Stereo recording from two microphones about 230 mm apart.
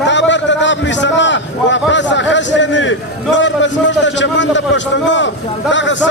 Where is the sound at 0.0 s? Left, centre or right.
Left.